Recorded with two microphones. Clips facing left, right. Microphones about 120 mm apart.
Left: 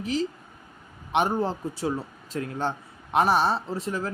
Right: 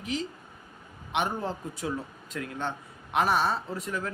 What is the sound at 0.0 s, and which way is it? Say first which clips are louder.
A man's voice: left 5 dB; 35° left (ahead or behind).